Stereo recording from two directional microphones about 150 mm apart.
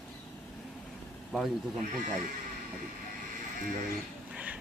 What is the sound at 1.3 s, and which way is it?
Speech, centre (ahead or behind).